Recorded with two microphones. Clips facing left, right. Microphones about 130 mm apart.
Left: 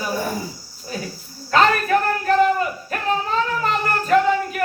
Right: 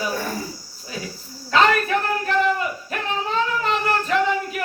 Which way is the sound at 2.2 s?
40° left (ahead or behind).